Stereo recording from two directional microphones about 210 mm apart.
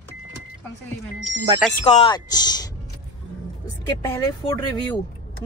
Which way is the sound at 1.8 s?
25° left (ahead or behind).